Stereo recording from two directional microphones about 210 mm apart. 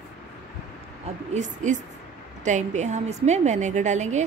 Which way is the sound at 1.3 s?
35° right (ahead or behind).